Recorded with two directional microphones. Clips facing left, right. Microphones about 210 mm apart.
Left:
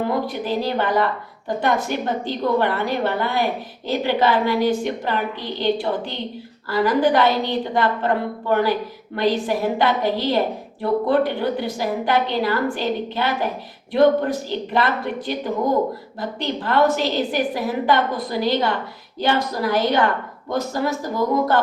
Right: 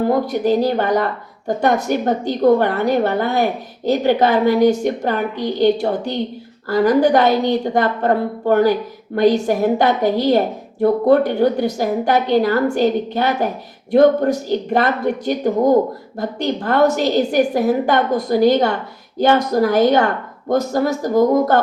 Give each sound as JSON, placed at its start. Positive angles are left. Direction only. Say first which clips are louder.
{"t": 0.1, "sound": "a woman's voice", "louder": "right 7 dB", "side_deg": -45}